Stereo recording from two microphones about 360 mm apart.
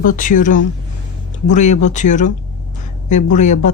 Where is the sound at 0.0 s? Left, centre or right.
Left.